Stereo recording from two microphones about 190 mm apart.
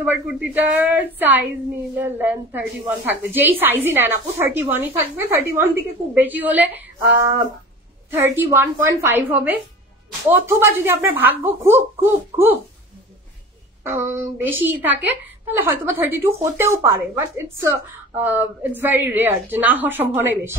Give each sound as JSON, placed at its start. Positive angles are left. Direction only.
{"t": 0.0, "sound": "a woman's voice", "side_deg": -10}
{"t": 13.8, "sound": "a woman's voice", "side_deg": -15}